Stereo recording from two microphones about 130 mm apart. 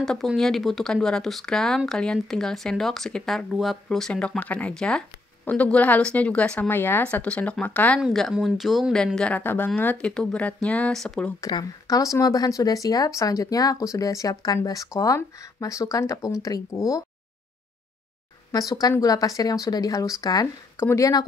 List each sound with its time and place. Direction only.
0.0 s speech: centre (ahead or behind)
8.0 s speech: centre (ahead or behind)
11.4 s speech: 25° left (ahead or behind)
18.5 s speech: 30° left (ahead or behind)